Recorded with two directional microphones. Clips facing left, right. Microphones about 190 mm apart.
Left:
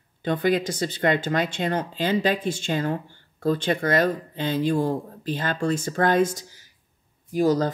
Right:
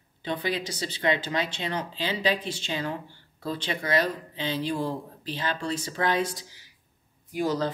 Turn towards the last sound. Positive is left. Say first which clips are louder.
# left 6 dB
turn(degrees=40)  # may be behind; listen again after turning